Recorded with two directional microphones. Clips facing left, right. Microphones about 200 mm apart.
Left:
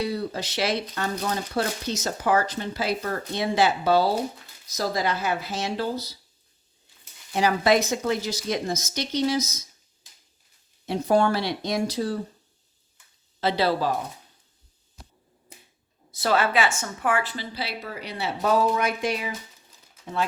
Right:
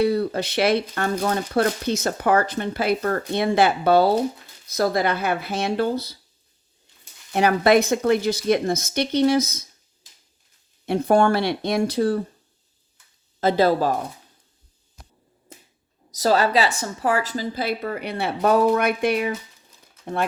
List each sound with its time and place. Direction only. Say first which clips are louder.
0.0 s speech: right 7 dB; 55° right (ahead or behind)
7.3 s speech: right 4 dB; 60° right (ahead or behind)
10.8 s speech: right 3 dB; 55° right (ahead or behind)
13.4 s speech: right 5 dB; 45° right (ahead or behind)
16.1 s speech: right 4 dB; 40° right (ahead or behind); by 19.3 s 60° right (ahead or behind)